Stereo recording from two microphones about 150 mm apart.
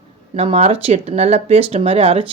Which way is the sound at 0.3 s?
40° right (ahead or behind).